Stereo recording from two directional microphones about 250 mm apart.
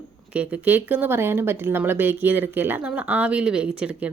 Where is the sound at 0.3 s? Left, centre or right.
Centre.